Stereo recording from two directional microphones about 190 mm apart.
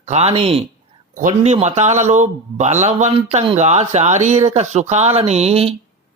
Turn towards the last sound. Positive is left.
turn(degrees=-30)  # may be behind; listen again after turning